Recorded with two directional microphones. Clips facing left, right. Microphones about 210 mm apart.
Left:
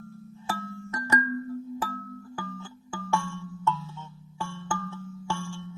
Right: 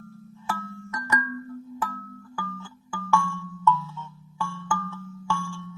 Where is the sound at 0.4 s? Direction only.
30° left (ahead or behind).